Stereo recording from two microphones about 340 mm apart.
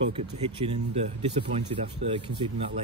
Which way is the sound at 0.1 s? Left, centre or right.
Centre.